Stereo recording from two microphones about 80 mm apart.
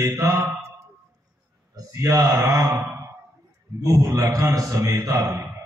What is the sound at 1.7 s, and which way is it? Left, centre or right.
Speech, right.